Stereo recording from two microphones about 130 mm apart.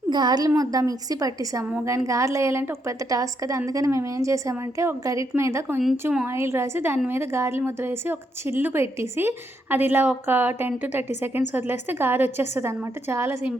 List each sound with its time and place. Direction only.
0.1 s a woman's voice: 30° right (ahead or behind)